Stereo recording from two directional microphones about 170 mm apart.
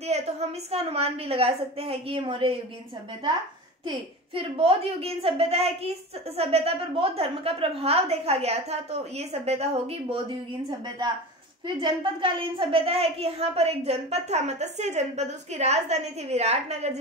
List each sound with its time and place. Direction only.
0.0 s a woman's voice: 40° right (ahead or behind)
3.8 s a woman's voice: 30° right (ahead or behind)
11.6 s a woman's voice: 30° right (ahead or behind)